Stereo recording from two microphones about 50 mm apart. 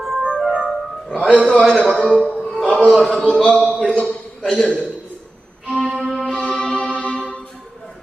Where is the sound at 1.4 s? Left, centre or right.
Centre.